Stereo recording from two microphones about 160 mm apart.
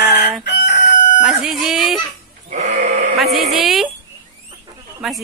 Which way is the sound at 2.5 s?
45° right (ahead or behind).